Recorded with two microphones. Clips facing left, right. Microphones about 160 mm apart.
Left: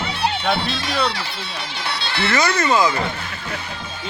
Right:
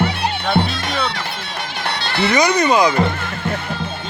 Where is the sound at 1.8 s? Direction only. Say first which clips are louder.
Right 4 dB; 50° right (ahead or behind).